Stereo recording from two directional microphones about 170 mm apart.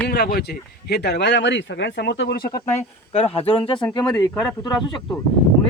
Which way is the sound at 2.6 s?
35° left (ahead or behind).